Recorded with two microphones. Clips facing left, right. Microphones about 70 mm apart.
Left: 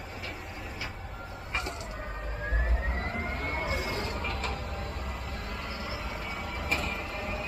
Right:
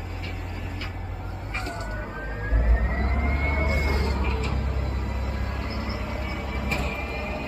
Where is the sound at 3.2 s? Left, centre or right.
Right.